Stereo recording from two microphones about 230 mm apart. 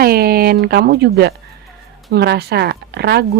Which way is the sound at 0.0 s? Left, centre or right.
Right.